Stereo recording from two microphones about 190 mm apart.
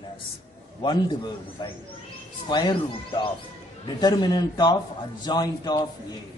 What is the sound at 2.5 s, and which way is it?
A man's voice, 25° left (ahead or behind).